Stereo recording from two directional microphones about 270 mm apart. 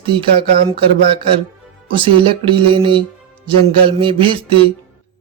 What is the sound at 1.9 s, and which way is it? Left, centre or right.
Speech, centre.